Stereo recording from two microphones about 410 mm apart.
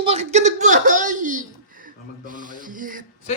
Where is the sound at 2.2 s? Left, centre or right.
Centre.